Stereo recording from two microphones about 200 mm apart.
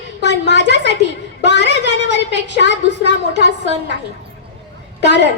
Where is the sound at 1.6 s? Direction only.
60° right (ahead or behind).